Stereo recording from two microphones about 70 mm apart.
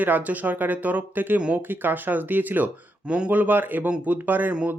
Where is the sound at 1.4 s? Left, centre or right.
Centre.